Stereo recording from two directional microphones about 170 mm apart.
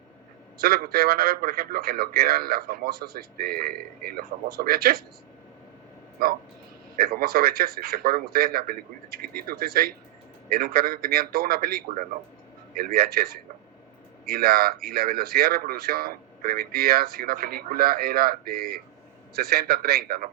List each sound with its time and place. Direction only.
0.6 s speech: 65° right (ahead or behind)
6.2 s speech: 60° right (ahead or behind)